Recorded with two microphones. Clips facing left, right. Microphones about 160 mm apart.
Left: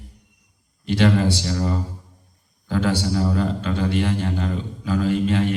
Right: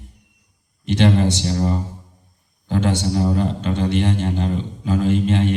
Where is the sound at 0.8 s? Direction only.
20° right (ahead or behind).